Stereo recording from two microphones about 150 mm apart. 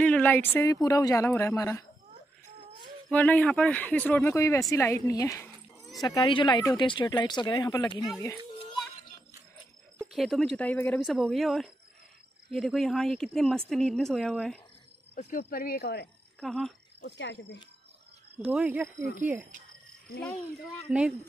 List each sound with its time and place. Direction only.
0.0 s a woman's voice: 10° left (ahead or behind)
3.1 s a woman's voice: 10° left (ahead or behind); by 8.1 s 25° left (ahead or behind)
10.1 s speech: centre (ahead or behind)
11.0 s speech: centre (ahead or behind)
15.1 s speech: 50° left (ahead or behind)
15.5 s speech: 80° left
16.3 s speech: centre (ahead or behind)
18.3 s speech: 10° right (ahead or behind)